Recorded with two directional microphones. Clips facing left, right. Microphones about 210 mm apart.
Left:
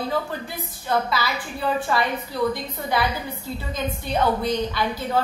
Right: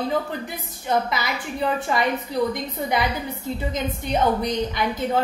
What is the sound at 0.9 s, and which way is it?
A woman's voice, 20° right (ahead or behind).